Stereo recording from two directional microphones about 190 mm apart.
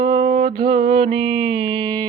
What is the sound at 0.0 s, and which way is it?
Mantra, 20° right (ahead or behind).